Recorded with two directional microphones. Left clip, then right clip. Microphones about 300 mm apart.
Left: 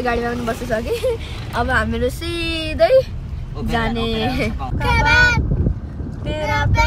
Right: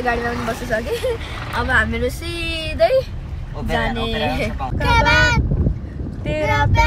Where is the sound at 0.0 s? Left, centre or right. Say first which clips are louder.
Even; left.